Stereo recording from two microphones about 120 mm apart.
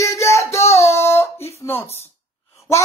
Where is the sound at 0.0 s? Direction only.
25° left (ahead or behind).